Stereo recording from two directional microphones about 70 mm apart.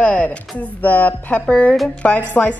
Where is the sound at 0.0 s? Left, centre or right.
Left.